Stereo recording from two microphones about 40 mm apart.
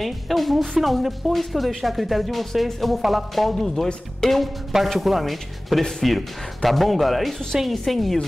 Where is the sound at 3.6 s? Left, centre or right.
Centre.